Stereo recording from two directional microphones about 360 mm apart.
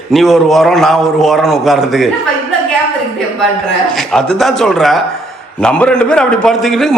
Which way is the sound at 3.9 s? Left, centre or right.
Centre.